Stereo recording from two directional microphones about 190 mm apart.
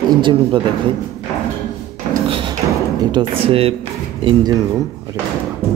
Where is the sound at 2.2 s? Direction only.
30° right (ahead or behind).